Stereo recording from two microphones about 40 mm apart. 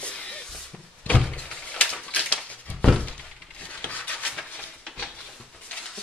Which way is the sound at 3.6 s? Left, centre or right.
Left.